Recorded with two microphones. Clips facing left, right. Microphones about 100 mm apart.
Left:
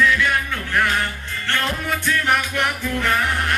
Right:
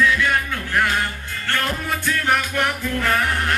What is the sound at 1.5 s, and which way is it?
Music, 5° right (ahead or behind).